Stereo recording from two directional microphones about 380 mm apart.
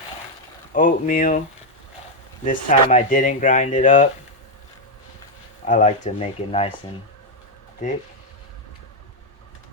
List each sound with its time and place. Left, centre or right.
0.7 s speech: left
2.4 s speech: centre
5.6 s speech: centre